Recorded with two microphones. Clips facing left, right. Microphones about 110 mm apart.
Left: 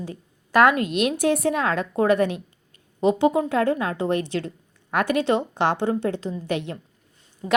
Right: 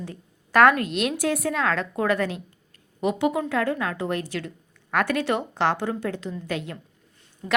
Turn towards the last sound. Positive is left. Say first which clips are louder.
# left 3 dB
turn(degrees=20)  # may be behind; listen again after turning